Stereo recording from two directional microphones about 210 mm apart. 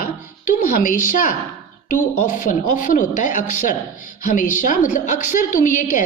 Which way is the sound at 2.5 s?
40° left (ahead or behind).